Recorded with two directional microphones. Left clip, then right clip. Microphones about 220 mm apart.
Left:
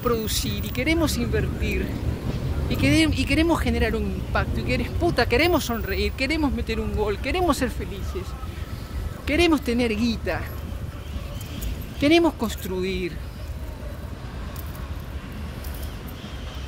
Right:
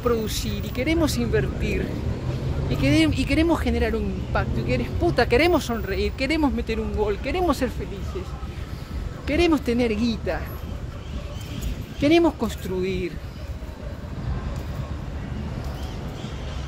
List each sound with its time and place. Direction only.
0.0 s speech: 20° left (ahead or behind)
1.0 s speech: 5° left (ahead or behind)
2.7 s speech: 20° left (ahead or behind); by 6.6 s 5° left (ahead or behind)
6.7 s speech: 25° left (ahead or behind)
9.2 s speech: 20° left (ahead or behind)
12.0 s speech: 15° left (ahead or behind)